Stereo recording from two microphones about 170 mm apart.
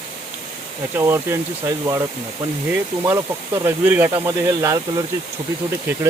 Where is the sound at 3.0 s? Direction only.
15° right (ahead or behind).